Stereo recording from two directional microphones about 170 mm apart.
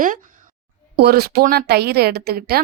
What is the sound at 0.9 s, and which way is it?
A woman's voice, 70° right (ahead or behind).